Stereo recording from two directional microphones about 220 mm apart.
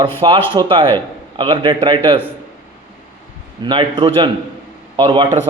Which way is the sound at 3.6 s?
20° right (ahead or behind).